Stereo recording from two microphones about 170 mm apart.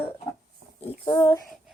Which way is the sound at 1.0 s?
20° left (ahead or behind).